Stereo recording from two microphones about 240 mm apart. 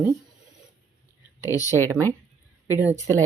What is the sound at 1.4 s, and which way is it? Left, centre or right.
Speech, centre.